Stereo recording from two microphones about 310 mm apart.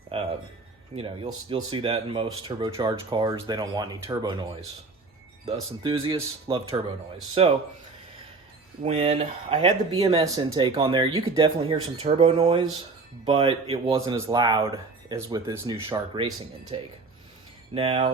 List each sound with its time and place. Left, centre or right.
0.1 s a sound: centre
0.9 s speech: centre
5.5 s speech: centre
8.8 s speech: centre